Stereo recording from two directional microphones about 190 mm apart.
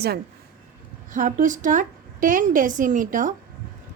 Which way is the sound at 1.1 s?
45° right (ahead or behind).